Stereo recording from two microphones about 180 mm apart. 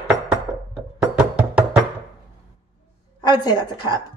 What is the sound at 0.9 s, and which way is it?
Music, 5° right (ahead or behind).